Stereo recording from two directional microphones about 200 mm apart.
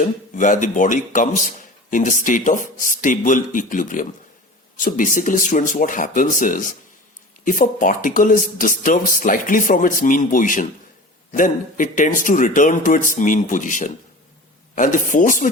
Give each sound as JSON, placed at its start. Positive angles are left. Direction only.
{"t": 0.0, "sound": "speech", "side_deg": 40}